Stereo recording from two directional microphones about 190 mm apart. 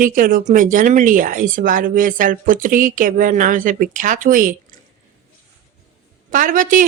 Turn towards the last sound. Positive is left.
turn(degrees=-45)  # may be behind; listen again after turning